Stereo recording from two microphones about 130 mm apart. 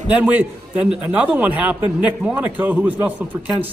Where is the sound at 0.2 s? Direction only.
10° right (ahead or behind).